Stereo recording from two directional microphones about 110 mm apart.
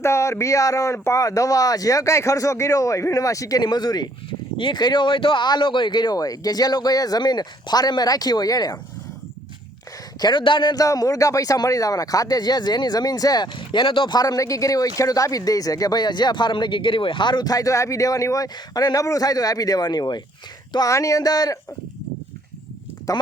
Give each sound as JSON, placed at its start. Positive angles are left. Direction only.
{"t": 0.0, "sound": "speech", "side_deg": 25}
{"t": 10.2, "sound": "speech", "side_deg": 40}
{"t": 13.6, "sound": "speech", "side_deg": 50}
{"t": 14.2, "sound": "speech", "side_deg": 35}
{"t": 23.1, "sound": "speech", "side_deg": 30}